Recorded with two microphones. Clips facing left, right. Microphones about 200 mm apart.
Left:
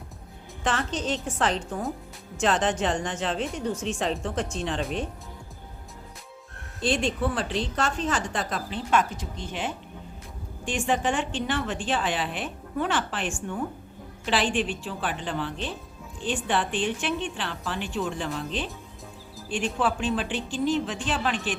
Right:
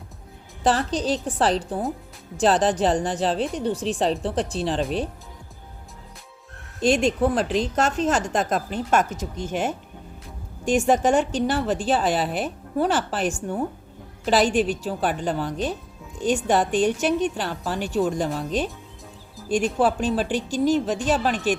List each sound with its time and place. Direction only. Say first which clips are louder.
0.6 s a woman's voice: right 6 dB; 35° right (ahead or behind)
6.8 s a woman's voice: right 6 dB; 45° right (ahead or behind)